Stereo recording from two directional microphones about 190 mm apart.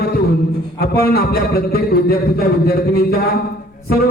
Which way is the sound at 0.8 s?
55° left (ahead or behind).